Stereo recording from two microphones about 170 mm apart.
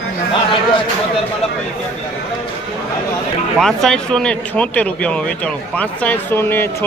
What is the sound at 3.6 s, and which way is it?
Speech, 5° left (ahead or behind).